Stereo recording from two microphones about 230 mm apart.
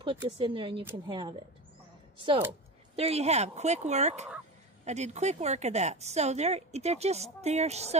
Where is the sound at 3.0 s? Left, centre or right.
Right.